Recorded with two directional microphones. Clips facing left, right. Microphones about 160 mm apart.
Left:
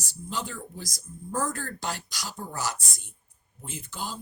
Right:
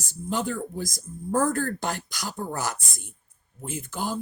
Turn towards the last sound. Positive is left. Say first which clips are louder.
# right 6 dB
turn(degrees=-50)  # may be behind; listen again after turning